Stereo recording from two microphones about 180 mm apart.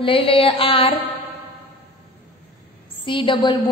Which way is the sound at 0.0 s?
30° left (ahead or behind).